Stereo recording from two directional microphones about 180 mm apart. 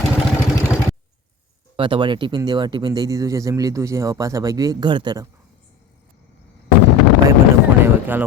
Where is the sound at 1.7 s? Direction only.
30° right (ahead or behind).